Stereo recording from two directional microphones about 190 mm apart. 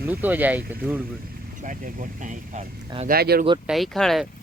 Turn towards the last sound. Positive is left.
turn(degrees=0)  # may be behind; listen again after turning